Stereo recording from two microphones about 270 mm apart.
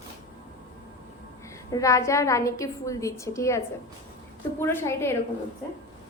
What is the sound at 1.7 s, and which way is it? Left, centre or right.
A woman's voice, centre.